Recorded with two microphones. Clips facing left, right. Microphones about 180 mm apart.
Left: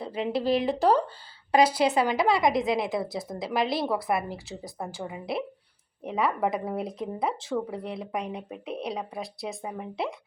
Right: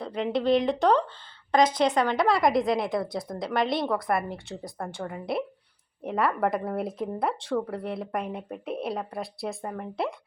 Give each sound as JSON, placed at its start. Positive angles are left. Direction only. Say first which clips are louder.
{"t": 0.0, "sound": "speech", "louder": "right 1 dB", "side_deg": 5}